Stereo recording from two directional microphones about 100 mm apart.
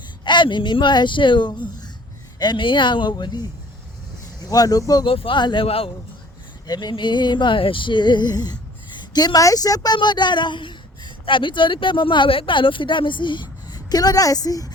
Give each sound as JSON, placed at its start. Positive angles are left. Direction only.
{"t": 0.3, "sound": "speech", "side_deg": 50}
{"t": 4.4, "sound": "speech", "side_deg": 40}
{"t": 5.0, "sound": "speech", "side_deg": 65}
{"t": 5.6, "sound": "a man's voice", "side_deg": 70}
{"t": 6.7, "sound": "speech", "side_deg": 45}